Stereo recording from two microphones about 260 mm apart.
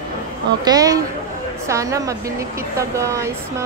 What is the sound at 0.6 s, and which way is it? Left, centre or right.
Speech, centre.